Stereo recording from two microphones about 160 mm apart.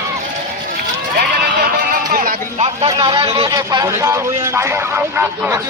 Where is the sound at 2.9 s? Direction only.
30° right (ahead or behind).